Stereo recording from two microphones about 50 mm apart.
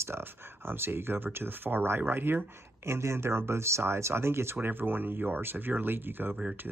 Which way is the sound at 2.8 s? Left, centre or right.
Right.